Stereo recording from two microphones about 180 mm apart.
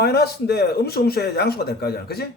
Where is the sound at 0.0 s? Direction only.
60° left (ahead or behind).